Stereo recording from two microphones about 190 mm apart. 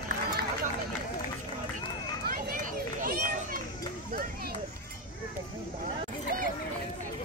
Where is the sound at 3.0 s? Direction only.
45° right (ahead or behind).